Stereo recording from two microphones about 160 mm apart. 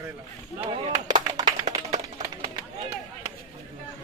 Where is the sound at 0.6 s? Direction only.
30° right (ahead or behind).